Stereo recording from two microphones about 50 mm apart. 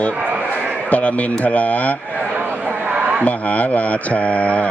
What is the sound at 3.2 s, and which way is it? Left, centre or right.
Speech, left.